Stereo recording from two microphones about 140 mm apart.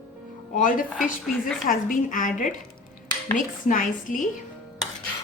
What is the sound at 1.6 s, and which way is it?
A woman's voice, 75° left (ahead or behind).